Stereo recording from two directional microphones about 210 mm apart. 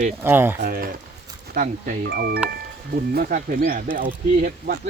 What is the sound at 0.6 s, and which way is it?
Speech, 45° right (ahead or behind).